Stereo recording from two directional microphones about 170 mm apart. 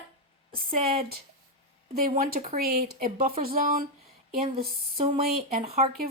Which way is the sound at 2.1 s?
60° right (ahead or behind).